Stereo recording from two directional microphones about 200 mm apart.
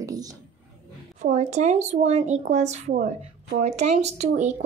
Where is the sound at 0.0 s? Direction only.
20° right (ahead or behind).